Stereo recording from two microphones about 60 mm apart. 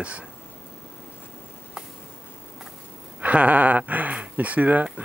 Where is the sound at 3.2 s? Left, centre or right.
Right.